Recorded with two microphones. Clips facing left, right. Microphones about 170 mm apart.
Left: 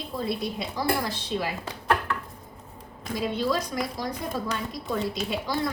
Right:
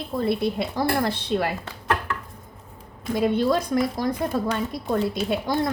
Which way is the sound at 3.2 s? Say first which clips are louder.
Right 6 dB; 55° right (ahead or behind).